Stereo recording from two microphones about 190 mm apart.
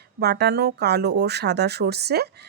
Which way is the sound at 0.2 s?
60° right (ahead or behind).